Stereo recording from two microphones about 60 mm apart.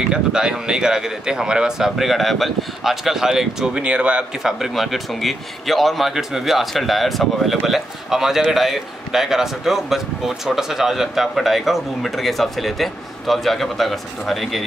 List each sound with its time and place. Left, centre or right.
0.1 s speech: centre
4.4 s a man's voice: centre